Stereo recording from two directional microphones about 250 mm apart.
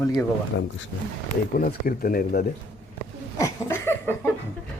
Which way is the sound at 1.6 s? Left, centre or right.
Left.